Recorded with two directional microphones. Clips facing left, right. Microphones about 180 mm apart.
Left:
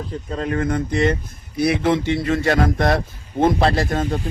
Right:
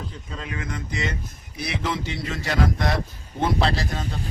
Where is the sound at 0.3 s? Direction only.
45° left (ahead or behind).